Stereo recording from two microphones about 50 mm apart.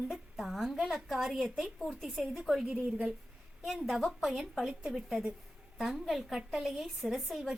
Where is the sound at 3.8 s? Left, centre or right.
Centre.